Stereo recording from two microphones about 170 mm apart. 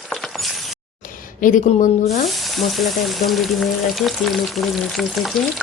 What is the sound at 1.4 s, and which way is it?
Speech, 50° left (ahead or behind).